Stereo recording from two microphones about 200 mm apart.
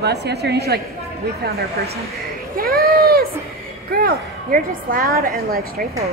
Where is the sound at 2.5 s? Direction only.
50° right (ahead or behind).